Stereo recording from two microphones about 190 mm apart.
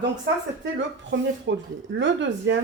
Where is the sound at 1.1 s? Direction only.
75° right (ahead or behind).